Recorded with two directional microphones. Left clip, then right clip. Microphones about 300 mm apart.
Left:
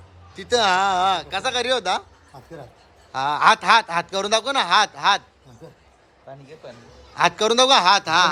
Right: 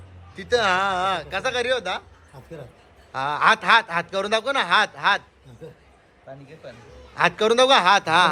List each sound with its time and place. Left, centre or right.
0.5 s speech: centre
7.3 s speech: centre